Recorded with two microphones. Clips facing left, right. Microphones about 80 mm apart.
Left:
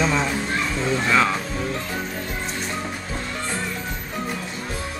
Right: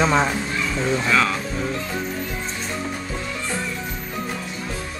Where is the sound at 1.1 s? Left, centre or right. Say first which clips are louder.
Left 1 dB; centre.